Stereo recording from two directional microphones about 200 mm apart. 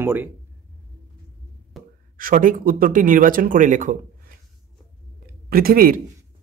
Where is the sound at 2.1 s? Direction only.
45° right (ahead or behind).